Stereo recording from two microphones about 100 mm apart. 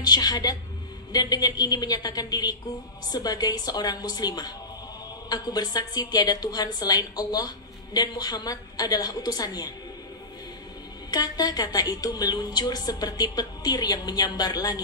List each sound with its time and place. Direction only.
0.0 s a woman's voice: 40° left (ahead or behind)
11.1 s a woman's voice: 40° left (ahead or behind)